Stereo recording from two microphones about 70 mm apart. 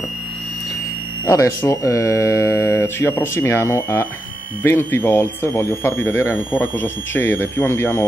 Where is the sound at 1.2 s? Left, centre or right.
Left.